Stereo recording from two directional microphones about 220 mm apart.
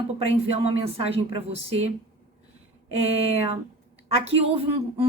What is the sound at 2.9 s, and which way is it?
Speech, 25° right (ahead or behind).